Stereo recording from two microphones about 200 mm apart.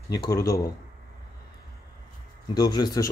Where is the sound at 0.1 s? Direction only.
15° left (ahead or behind).